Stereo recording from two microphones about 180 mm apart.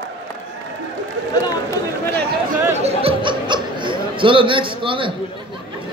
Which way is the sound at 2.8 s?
35° right (ahead or behind).